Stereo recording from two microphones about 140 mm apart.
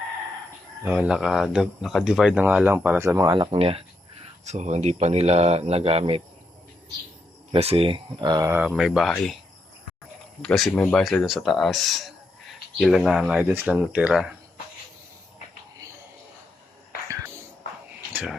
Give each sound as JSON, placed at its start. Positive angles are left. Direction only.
{"t": 0.9, "sound": "speech", "side_deg": -5}
{"t": 3.3, "sound": "speech", "side_deg": -35}
{"t": 4.4, "sound": "speech", "side_deg": -55}
{"t": 7.5, "sound": "speech", "side_deg": -45}
{"t": 8.6, "sound": "speech", "side_deg": -5}
{"t": 10.4, "sound": "speech", "side_deg": 5}
{"t": 18.1, "sound": "a sound", "side_deg": -10}